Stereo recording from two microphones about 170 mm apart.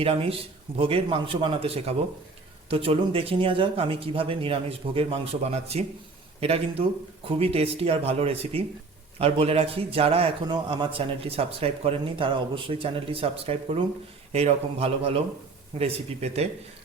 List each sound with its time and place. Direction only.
0.0 s a man's voice: 35° right (ahead or behind)